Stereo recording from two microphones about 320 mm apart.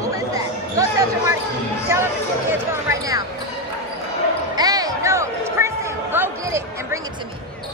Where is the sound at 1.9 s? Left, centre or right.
Centre.